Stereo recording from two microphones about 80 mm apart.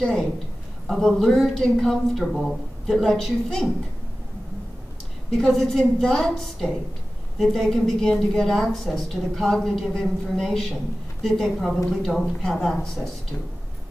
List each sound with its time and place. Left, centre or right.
0.8 s a woman's voice: centre
5.3 s a woman's voice: centre